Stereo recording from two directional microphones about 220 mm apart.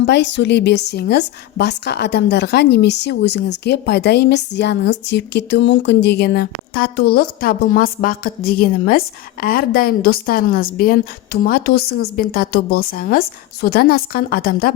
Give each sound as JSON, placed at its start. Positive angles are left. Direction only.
{"t": 0.0, "sound": "a woman's voice", "side_deg": 55}